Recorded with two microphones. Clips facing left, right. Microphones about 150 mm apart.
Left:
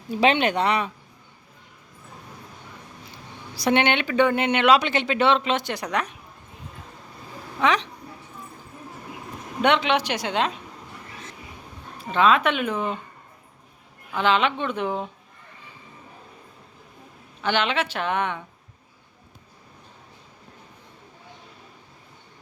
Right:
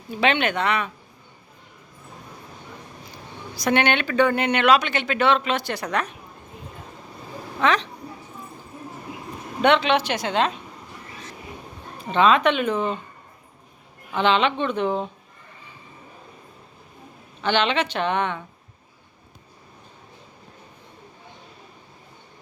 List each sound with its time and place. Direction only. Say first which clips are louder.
0.1 s speech: left 2 dB; 35° left (ahead or behind)
3.5 s speech: even; 25° left (ahead or behind)
7.6 s speech: right 1 dB; 15° left (ahead or behind)
9.6 s speech: right 2 dB; 15° left (ahead or behind)
11.9 s speech: right 1 dB; 5° left (ahead or behind)
14.1 s speech: right 1 dB; 5° left (ahead or behind)
17.4 s speech: right 2 dB; 10° left (ahead or behind)